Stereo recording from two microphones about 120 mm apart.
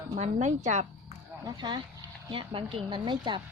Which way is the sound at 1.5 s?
40° right (ahead or behind).